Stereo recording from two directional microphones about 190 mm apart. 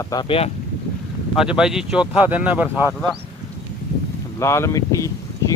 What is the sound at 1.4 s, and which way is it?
Speech, 5° right (ahead or behind).